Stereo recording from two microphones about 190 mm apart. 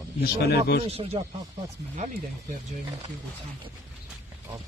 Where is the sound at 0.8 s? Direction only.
30° right (ahead or behind).